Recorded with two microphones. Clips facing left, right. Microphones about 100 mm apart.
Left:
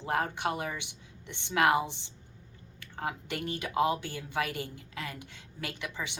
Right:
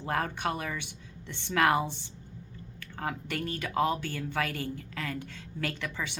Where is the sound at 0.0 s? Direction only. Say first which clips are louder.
Even; 20° left (ahead or behind).